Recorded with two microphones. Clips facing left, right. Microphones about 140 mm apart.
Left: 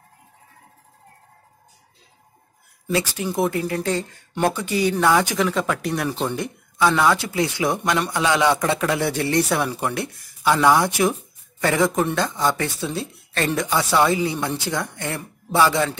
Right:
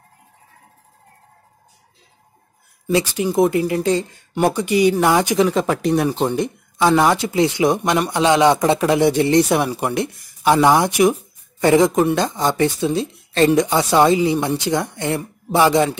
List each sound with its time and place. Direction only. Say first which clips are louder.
2.9 s speech: right 5 dB; 20° right (ahead or behind)